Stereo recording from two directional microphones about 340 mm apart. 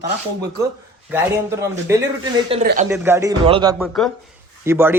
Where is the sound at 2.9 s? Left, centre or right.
Centre.